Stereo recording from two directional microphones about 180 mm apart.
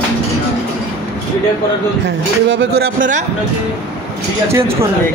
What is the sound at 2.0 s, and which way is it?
Speech, 80° right.